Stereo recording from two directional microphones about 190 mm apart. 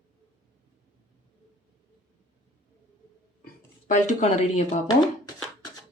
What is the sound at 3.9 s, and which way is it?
Speech, 40° left (ahead or behind).